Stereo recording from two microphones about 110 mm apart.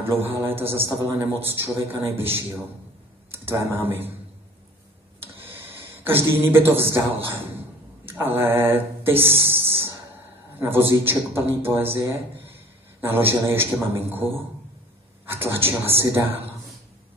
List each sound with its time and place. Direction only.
0.0 s a man's voice: 20° right (ahead or behind)
3.3 s speech: 20° right (ahead or behind)
5.2 s a sound: 20° right (ahead or behind)
8.0 s a man's voice: 20° right (ahead or behind)